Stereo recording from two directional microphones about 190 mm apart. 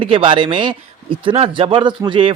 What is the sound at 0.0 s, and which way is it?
A man's voice, 25° right (ahead or behind).